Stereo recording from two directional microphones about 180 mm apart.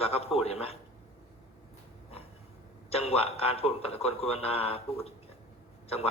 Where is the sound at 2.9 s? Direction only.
35° left (ahead or behind).